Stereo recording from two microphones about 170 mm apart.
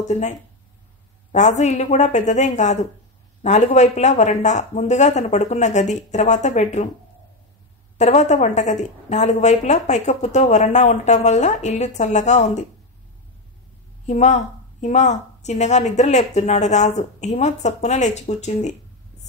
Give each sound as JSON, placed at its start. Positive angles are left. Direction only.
{"t": 0.1, "sound": "a woman's voice", "side_deg": 45}
{"t": 8.0, "sound": "a woman's voice", "side_deg": 45}
{"t": 14.0, "sound": "a woman's voice", "side_deg": 45}